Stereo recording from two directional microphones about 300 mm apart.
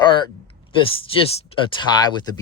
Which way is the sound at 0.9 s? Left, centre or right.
Centre.